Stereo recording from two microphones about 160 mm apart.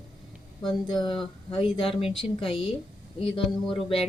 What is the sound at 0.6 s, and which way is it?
Speech, 30° left (ahead or behind).